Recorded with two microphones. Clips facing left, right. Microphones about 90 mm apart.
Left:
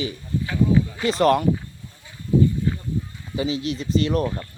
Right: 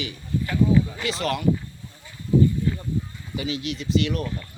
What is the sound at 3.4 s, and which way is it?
Speech, 30° left (ahead or behind).